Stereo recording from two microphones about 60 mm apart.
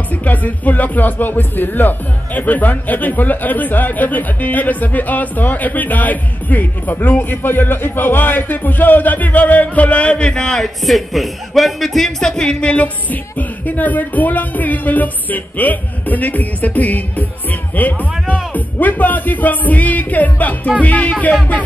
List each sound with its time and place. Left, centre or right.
0.2 s speech: left